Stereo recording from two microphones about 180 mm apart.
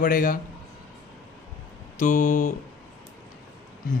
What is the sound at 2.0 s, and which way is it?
Speech, 45° left (ahead or behind).